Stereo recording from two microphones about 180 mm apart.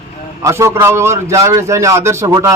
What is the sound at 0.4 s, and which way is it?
A man's voice, 15° right (ahead or behind).